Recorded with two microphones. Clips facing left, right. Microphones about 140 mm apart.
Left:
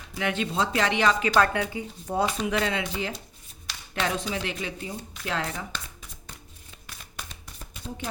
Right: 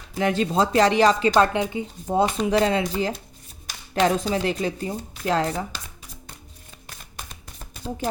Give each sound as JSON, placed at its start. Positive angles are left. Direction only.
{"t": 0.1, "sound": "speech", "side_deg": -35}
{"t": 1.4, "sound": "speech", "side_deg": -20}
{"t": 2.5, "sound": "speech", "side_deg": -35}